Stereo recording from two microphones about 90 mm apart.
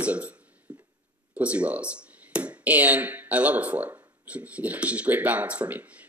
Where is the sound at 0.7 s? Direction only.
15° right (ahead or behind).